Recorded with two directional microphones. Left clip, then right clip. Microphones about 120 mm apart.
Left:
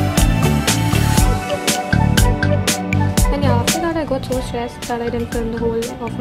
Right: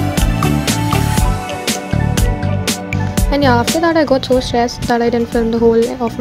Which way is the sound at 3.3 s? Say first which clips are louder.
Right 9 dB; 60° right (ahead or behind).